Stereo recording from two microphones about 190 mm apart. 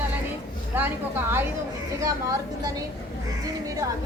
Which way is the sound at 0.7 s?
10° right (ahead or behind).